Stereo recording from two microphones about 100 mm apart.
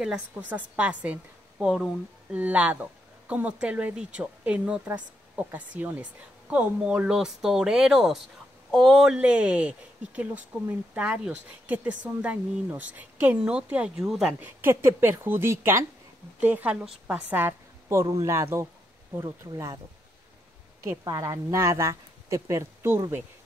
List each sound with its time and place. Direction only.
0.4 s a woman's voice: 15° right (ahead or behind)
14.4 s a woman's voice: 20° right (ahead or behind)
21.0 s speech: 30° right (ahead or behind)